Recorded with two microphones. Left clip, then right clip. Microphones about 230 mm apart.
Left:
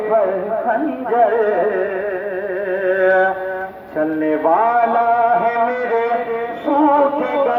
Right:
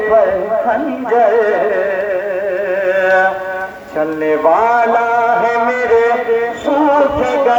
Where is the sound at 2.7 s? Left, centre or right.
Right.